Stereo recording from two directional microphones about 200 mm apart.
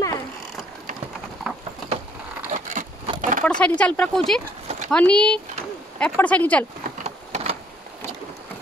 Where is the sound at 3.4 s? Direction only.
5° left (ahead or behind).